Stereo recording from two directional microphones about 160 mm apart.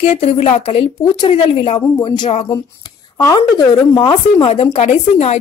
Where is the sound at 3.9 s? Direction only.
30° left (ahead or behind); by 5.3 s 45° left (ahead or behind).